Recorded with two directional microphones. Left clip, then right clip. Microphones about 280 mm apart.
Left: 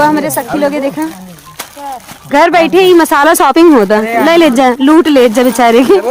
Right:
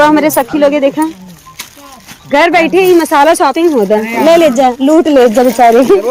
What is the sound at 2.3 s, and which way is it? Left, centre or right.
A woman's voice, centre.